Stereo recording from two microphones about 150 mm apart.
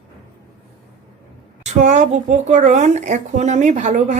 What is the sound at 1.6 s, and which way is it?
Speech, 55° right (ahead or behind).